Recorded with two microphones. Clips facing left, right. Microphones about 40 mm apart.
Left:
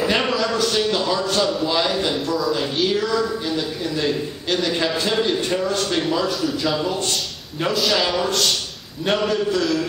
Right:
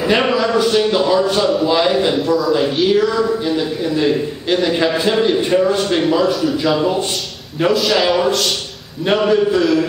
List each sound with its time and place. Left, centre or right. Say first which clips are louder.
0.2 s a man's voice: right 6 dB; centre
2.1 s a man's voice: right 6 dB; centre
7.6 s a man's voice: right 6 dB; centre
7.9 s a man's voice: right 6 dB; centre